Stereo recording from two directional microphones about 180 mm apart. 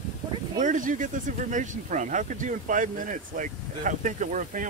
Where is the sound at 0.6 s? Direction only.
45° right (ahead or behind).